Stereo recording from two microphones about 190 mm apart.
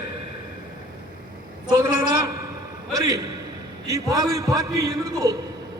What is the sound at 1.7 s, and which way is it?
A man's voice, 20° right (ahead or behind).